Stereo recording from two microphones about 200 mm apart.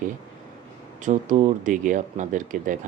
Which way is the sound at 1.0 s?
40° right (ahead or behind).